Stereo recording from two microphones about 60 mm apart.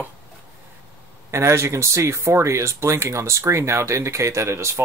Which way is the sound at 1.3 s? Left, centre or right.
Right.